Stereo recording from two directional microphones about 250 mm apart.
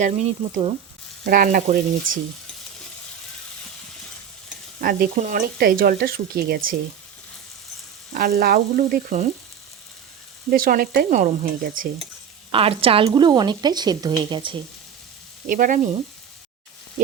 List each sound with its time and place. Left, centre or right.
0.0 s speech: right
4.8 s speech: right
8.1 s speech: right
10.5 s speech: right
12.5 s a woman's voice: right
15.4 s speech: right